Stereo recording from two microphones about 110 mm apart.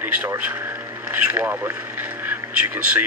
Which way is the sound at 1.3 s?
15° right (ahead or behind).